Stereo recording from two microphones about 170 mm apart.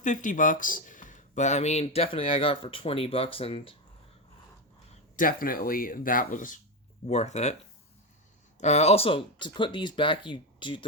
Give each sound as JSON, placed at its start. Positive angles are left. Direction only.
{"t": 0.0, "sound": "speech", "side_deg": 50}
{"t": 5.1, "sound": "speech", "side_deg": 55}
{"t": 7.1, "sound": "speech", "side_deg": 40}
{"t": 8.5, "sound": "speech", "side_deg": 40}